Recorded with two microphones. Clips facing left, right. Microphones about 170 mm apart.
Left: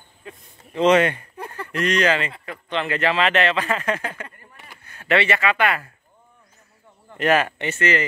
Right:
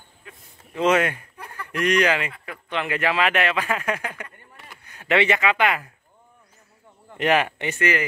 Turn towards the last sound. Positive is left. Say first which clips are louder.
# left 1 dB
turn(degrees=-15)  # may be behind; listen again after turning